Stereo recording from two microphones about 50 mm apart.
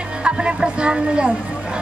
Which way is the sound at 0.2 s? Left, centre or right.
Centre.